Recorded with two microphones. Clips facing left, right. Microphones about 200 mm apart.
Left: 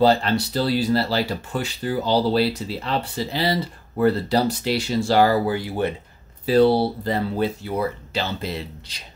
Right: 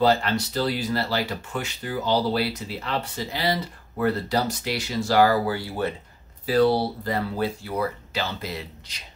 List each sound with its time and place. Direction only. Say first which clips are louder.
0.0 s speech: left 3 dB; 30° left (ahead or behind)